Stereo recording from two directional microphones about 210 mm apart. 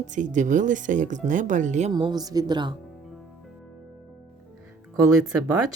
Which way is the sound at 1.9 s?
20° right (ahead or behind).